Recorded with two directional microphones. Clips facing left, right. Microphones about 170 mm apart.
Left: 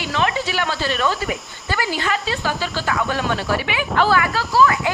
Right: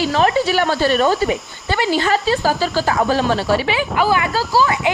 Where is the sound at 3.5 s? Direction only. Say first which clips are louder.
Right 4 dB; 25° right (ahead or behind).